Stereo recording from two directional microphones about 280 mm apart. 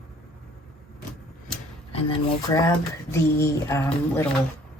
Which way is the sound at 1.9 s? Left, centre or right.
Centre.